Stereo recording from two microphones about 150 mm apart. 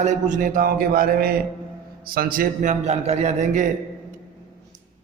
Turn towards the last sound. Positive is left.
turn(degrees=-60)  # may be behind; listen again after turning